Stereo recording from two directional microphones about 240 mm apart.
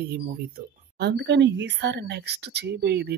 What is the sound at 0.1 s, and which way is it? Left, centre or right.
Speech, right.